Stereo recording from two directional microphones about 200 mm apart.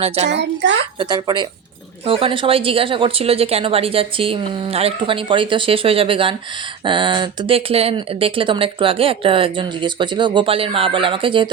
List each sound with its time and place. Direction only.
0.3 s a child's voice: 60° right (ahead or behind)
0.9 s speech: 20° right (ahead or behind)